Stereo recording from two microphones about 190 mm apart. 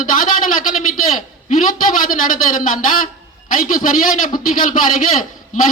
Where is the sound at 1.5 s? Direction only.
45° left (ahead or behind).